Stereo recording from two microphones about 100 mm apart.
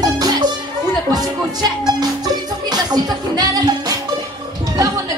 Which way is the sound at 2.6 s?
45° right (ahead or behind).